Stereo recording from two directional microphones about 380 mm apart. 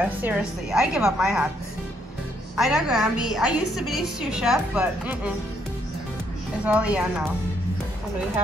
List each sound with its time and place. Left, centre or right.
0.0 s a woman's voice: centre
2.5 s a woman's voice: centre
3.4 s a woman's voice: left
3.8 s a woman's voice: centre
6.6 s a woman's voice: centre